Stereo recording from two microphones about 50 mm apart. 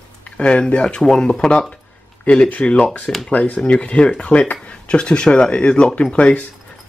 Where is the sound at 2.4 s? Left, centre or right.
Left.